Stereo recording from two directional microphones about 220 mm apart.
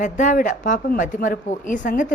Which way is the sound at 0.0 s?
35° left (ahead or behind).